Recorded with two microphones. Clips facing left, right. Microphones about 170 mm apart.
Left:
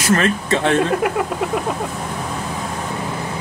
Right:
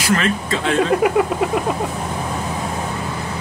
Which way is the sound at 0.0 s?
50° left (ahead or behind).